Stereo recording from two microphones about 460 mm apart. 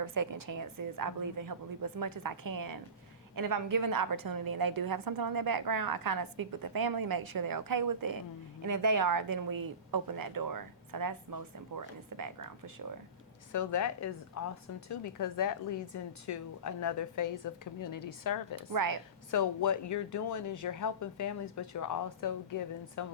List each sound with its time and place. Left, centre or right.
0.0 s a woman's voice: right
13.5 s speech: left
18.7 s a woman's voice: right
19.3 s speech: left